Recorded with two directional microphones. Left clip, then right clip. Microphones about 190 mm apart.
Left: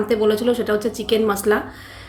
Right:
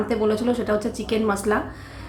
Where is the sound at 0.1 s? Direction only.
20° left (ahead or behind).